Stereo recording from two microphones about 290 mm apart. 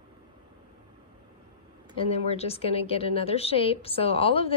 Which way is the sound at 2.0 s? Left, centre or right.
Left.